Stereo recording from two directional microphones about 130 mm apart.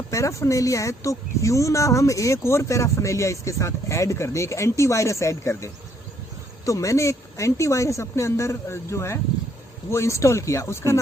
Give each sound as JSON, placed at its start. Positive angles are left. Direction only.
{"t": 0.1, "sound": "speech", "side_deg": 25}